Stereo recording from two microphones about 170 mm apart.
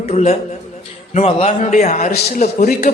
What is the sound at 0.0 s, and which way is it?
A man's voice, 40° left (ahead or behind).